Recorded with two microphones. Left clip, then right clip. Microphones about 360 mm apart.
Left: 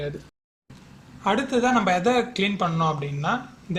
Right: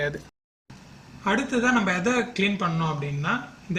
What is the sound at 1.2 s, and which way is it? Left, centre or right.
Speech, centre.